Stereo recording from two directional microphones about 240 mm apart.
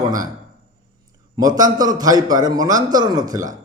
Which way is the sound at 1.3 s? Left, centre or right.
Centre.